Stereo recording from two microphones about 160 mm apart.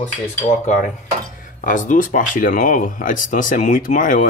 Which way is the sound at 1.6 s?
55° left (ahead or behind).